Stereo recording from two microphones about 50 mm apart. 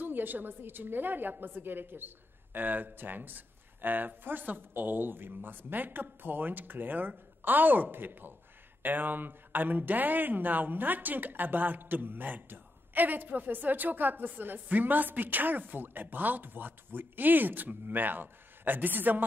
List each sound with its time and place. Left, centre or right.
0.0 s a woman's voice: right